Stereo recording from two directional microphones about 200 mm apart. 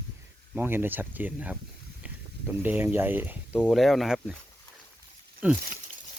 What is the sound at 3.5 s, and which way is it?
Speech, 5° left (ahead or behind).